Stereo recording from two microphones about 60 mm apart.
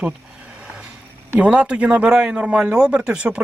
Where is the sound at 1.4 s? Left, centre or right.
Centre.